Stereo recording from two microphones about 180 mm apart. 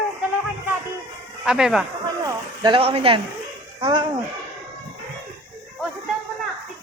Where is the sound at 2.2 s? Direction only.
25° right (ahead or behind).